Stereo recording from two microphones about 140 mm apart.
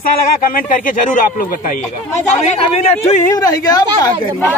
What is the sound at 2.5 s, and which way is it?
Speech, 50° left (ahead or behind).